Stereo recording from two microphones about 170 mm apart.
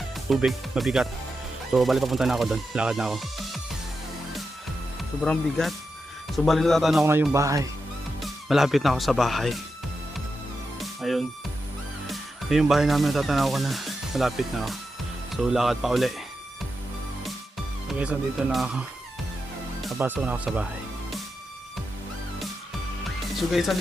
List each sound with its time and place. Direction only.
0.3 s speech: centre (ahead or behind)
5.2 s speech: 5° left (ahead or behind)
7.0 s speech: 15° right (ahead or behind)
8.2 s speech: centre (ahead or behind)
10.8 s music: centre (ahead or behind)
12.0 s speech: centre (ahead or behind)
17.8 s speech: 5° right (ahead or behind)
20.0 s speech: 10° right (ahead or behind)
23.5 s speech: centre (ahead or behind)